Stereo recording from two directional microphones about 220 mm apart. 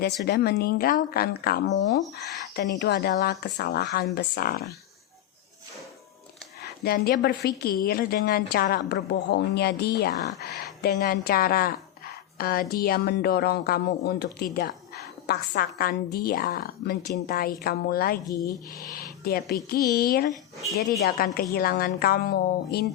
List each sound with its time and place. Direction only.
0.3 s speech: 45° left (ahead or behind)
6.6 s speech: 45° left (ahead or behind)
18.3 s speech: 15° left (ahead or behind)
19.2 s speech: 45° left (ahead or behind)
21.3 s speech: 45° left (ahead or behind)